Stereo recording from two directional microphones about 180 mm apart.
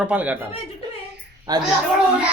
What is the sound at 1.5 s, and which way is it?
Speech, 20° right (ahead or behind).